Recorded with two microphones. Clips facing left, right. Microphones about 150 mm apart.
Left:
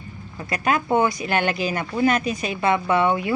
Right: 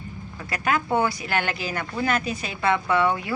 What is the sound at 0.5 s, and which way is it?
Speech, 20° left (ahead or behind).